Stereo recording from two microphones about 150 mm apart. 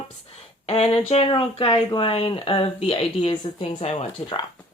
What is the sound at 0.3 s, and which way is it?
Speech, 40° left (ahead or behind).